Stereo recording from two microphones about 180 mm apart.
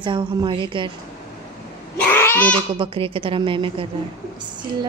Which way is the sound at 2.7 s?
30° right (ahead or behind).